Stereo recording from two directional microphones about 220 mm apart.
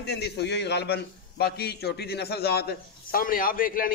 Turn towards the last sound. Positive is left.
turn(degrees=40)  # may be behind; listen again after turning